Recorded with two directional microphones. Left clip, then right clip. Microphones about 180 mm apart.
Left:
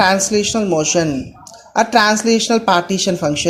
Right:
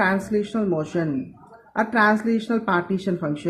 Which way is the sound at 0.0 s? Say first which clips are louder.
Left 8 dB; 15° left (ahead or behind).